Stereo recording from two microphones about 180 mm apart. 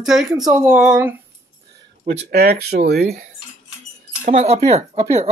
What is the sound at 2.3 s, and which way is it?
Speech, 60° right (ahead or behind).